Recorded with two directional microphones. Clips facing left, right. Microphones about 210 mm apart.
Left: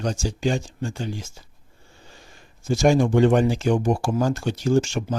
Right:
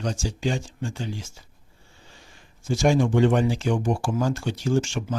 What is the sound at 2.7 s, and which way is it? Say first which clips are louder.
Speech: left 2 dB; 40° left (ahead or behind).